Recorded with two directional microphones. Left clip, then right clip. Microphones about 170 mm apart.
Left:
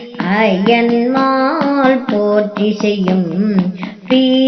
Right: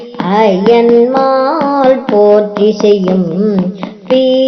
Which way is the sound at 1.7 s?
40° right (ahead or behind).